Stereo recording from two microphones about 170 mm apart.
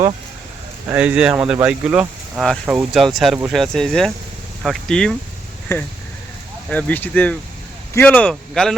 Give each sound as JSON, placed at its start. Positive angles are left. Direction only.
{"t": 0.9, "sound": "speech", "side_deg": -5}
{"t": 5.7, "sound": "speech", "side_deg": 15}